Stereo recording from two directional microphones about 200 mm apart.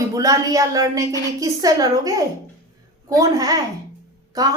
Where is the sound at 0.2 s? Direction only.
15° right (ahead or behind).